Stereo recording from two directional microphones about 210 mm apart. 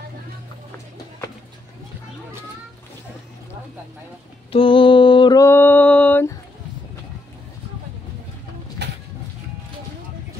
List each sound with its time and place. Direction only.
4.5 s mantra: 25° left (ahead or behind); by 6.3 s 10° left (ahead or behind)